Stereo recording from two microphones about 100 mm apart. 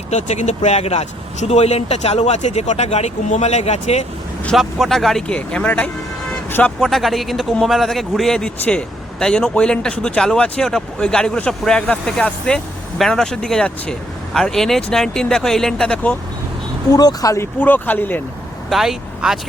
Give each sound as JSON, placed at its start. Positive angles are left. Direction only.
{"t": 0.8, "sound": "speech", "side_deg": 90}
{"t": 4.5, "sound": "a man's voice", "side_deg": 0}
{"t": 6.7, "sound": "a man's voice", "side_deg": 0}
{"t": 16.9, "sound": "speech", "side_deg": 40}
{"t": 18.7, "sound": "speech", "side_deg": -5}